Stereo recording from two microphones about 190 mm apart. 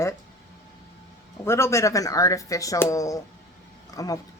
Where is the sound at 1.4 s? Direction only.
15° left (ahead or behind).